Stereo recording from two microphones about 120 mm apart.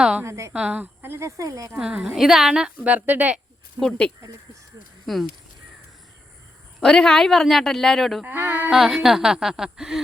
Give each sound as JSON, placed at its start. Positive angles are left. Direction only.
{"t": 0.2, "sound": "speech", "side_deg": -25}
{"t": 0.5, "sound": "speech", "side_deg": -10}
{"t": 1.8, "sound": "a woman's voice", "side_deg": -5}
{"t": 3.8, "sound": "speech", "side_deg": 5}
{"t": 6.7, "sound": "speech", "side_deg": 5}
{"t": 8.2, "sound": "a woman's voice", "side_deg": -15}
{"t": 8.7, "sound": "speech", "side_deg": -5}